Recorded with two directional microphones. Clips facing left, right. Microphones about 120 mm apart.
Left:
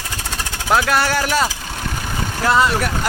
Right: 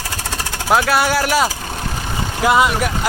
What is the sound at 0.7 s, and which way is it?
Speech, 5° right (ahead or behind).